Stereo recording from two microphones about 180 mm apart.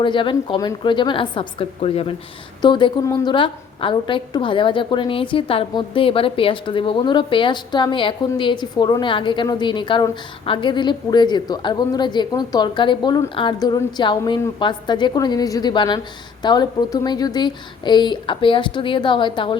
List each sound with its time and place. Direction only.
0.0 s a woman's voice: 25° left (ahead or behind)